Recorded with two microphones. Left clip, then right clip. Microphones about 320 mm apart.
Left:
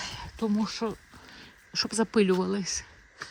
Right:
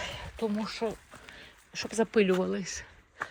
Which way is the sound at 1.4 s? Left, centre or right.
Left.